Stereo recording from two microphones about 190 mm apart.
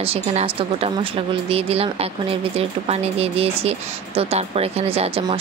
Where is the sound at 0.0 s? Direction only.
30° right (ahead or behind).